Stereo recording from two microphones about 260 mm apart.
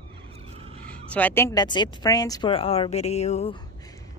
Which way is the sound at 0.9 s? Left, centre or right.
Centre.